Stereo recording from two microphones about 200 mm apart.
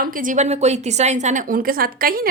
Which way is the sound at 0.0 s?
45° right (ahead or behind).